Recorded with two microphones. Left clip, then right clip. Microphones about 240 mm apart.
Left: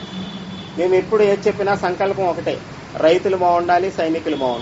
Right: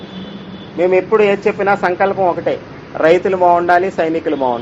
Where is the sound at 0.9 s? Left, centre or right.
Right.